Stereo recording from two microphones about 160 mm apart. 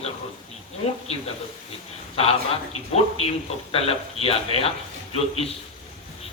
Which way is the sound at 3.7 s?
35° left (ahead or behind).